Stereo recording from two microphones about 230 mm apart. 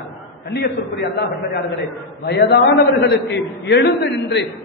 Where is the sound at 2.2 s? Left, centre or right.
Left.